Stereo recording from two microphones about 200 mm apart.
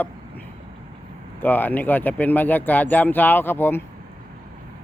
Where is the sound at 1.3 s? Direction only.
10° left (ahead or behind).